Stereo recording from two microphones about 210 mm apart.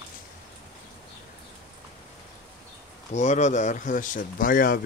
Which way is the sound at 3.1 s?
35° left (ahead or behind).